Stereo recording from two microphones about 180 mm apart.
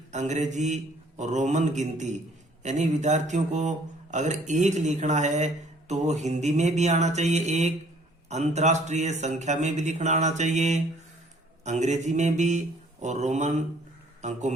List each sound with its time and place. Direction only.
0.1 s speech: 40° right (ahead or behind)